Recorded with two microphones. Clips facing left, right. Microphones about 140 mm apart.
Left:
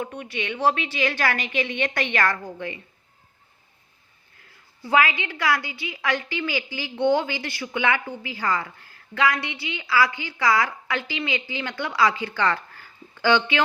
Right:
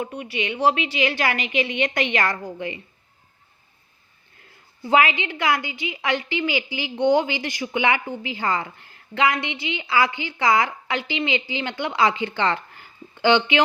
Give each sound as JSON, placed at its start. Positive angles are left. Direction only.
{"t": 0.0, "sound": "a woman's voice", "side_deg": -10}
{"t": 4.4, "sound": "a woman's voice", "side_deg": -25}